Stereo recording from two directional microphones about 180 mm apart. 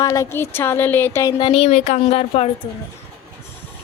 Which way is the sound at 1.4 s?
30° left (ahead or behind).